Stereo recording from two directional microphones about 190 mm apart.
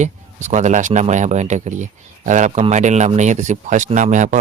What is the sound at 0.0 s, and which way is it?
A man's voice, 40° right (ahead or behind).